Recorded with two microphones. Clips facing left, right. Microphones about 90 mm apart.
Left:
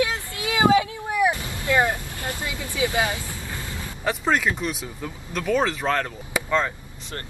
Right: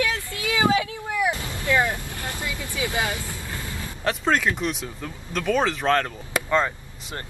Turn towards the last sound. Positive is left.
turn(degrees=-5)  # may be behind; listen again after turning